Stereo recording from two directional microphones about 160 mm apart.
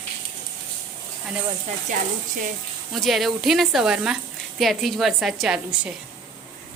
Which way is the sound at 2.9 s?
Centre (ahead or behind).